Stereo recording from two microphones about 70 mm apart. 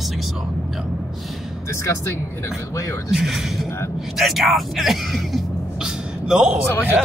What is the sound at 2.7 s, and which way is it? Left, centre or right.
Speech, left.